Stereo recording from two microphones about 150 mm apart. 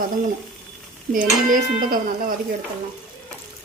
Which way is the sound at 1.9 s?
70° right (ahead or behind).